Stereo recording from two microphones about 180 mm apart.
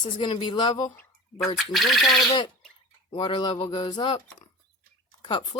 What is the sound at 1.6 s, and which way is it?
Speech, centre (ahead or behind).